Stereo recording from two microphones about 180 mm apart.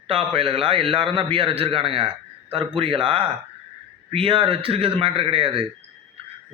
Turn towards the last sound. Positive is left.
turn(degrees=-30)  # may be behind; listen again after turning